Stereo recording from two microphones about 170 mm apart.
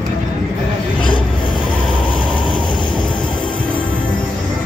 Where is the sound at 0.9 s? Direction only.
30° left (ahead or behind).